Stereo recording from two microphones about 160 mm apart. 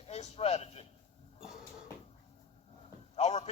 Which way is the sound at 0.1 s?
45° left (ahead or behind).